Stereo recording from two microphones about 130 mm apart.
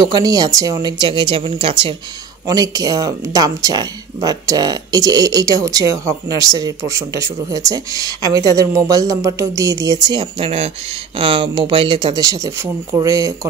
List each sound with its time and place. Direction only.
0.0 s speech: 30° right (ahead or behind)
2.4 s speech: 30° right (ahead or behind)
10.4 s speech: 50° right (ahead or behind)
11.1 s speech: 40° right (ahead or behind); by 13.5 s 25° right (ahead or behind)